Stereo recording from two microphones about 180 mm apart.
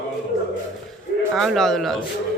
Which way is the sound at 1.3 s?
Centre (ahead or behind).